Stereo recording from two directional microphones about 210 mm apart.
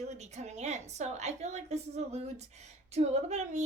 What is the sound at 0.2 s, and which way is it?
A woman's voice, 30° right (ahead or behind).